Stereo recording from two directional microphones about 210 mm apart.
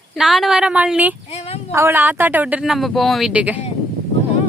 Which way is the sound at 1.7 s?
10° right (ahead or behind).